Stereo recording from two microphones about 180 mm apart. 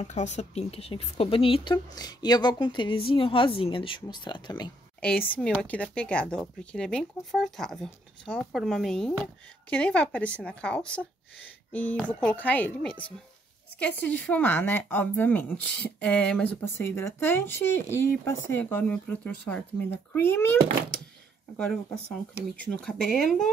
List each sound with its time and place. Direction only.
0.0 s speech: 40° left (ahead or behind); by 4.6 s 25° left (ahead or behind)
5.0 s speech: 5° left (ahead or behind)
22.6 s speech: 5° left (ahead or behind)